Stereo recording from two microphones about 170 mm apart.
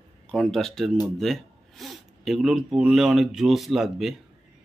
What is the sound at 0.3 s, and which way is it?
A man's voice, 5° left (ahead or behind).